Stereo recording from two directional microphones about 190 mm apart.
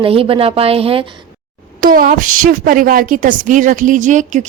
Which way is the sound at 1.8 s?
45° right (ahead or behind).